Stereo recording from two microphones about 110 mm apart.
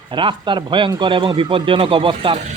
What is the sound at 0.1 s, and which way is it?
Speech, 50° right (ahead or behind).